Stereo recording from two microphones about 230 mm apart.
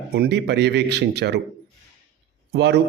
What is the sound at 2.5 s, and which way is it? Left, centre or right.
Speech, right.